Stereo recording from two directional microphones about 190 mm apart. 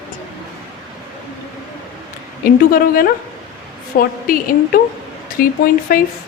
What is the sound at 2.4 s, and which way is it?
A woman's voice, 50° left (ahead or behind).